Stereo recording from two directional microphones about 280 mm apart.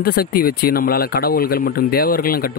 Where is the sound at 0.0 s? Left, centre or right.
Left.